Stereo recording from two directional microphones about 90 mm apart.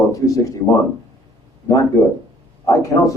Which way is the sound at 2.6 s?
40° left (ahead or behind).